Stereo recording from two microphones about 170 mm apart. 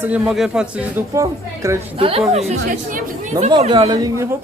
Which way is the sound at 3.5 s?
30° right (ahead or behind).